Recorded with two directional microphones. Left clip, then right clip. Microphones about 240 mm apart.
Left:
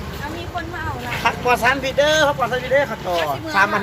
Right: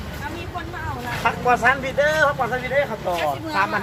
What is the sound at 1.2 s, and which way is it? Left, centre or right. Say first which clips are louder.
Speech: left 1 dB; left.